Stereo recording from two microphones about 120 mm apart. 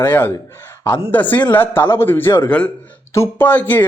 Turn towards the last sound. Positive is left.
turn(degrees=15)  # may be behind; listen again after turning